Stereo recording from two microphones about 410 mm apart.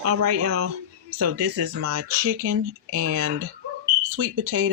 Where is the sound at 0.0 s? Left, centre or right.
Right.